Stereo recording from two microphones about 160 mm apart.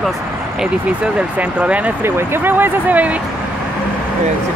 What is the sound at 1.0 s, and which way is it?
Speech, 5° right (ahead or behind).